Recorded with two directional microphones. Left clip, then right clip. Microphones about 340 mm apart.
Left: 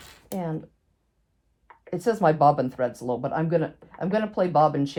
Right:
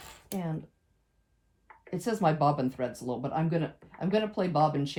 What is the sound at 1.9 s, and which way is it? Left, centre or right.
Speech, left.